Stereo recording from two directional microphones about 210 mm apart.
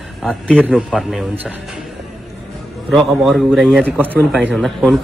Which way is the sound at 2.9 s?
Centre (ahead or behind).